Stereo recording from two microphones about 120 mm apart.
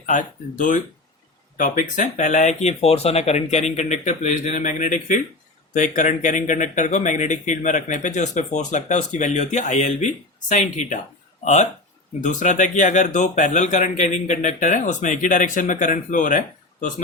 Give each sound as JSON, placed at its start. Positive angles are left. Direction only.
{"t": 0.0, "sound": "speech", "side_deg": 90}
{"t": 10.5, "sound": "speech", "side_deg": 90}